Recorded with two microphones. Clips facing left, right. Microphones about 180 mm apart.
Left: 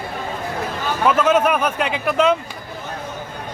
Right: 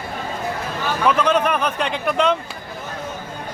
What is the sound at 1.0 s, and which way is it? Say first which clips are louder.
Speech: left 2 dB; 5° left (ahead or behind).